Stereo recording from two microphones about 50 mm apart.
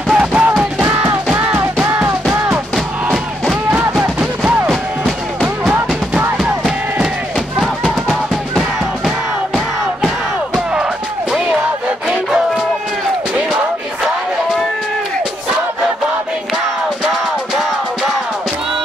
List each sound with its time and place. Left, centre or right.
0.1 s music: centre
1.3 s music: right
4.2 s music: centre